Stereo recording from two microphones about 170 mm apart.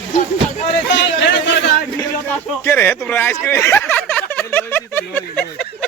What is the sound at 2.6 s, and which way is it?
Speech, 15° left (ahead or behind).